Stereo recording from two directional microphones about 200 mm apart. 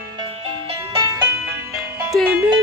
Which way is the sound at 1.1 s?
15° right (ahead or behind).